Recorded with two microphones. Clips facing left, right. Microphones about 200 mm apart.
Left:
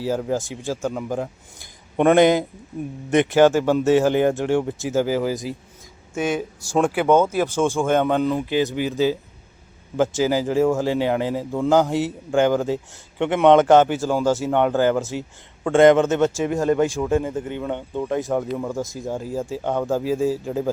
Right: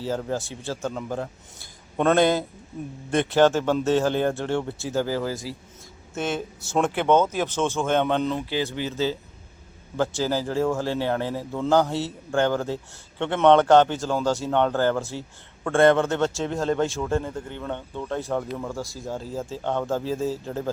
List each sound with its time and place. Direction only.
0.0 s a man's voice: 10° left (ahead or behind)
10.2 s a man's voice: 15° left (ahead or behind)